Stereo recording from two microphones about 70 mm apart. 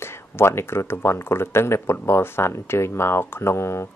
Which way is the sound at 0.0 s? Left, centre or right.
Left.